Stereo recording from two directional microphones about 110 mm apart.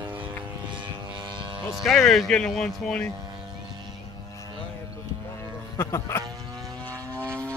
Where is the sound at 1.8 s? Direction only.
Centre (ahead or behind).